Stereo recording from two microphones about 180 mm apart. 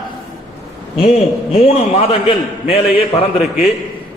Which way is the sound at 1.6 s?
35° left (ahead or behind).